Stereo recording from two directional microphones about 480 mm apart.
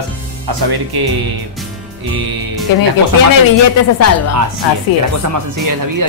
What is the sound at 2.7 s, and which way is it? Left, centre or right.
Speech, left.